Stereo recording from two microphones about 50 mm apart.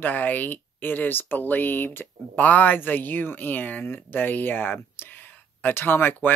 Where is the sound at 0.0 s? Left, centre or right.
Left.